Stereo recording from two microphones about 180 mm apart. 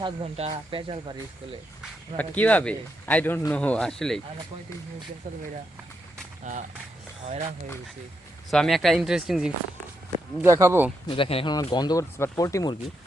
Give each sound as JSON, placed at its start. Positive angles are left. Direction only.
{"t": 0.0, "sound": "speech", "side_deg": -35}
{"t": 1.8, "sound": "speech", "side_deg": 10}
{"t": 6.4, "sound": "speech", "side_deg": -45}
{"t": 8.4, "sound": "speech", "side_deg": 0}
{"t": 10.4, "sound": "speech", "side_deg": -15}
{"t": 11.1, "sound": "speech", "side_deg": 30}